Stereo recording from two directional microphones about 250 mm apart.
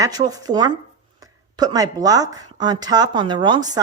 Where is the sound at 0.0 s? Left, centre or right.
Centre.